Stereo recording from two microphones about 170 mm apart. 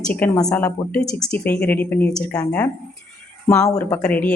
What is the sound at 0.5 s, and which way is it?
Speech, 10° left (ahead or behind).